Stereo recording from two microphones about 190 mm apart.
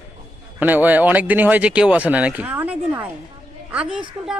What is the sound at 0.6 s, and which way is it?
Speech, 10° right (ahead or behind).